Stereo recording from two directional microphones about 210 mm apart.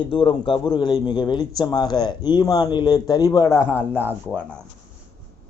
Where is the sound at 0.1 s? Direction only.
25° left (ahead or behind).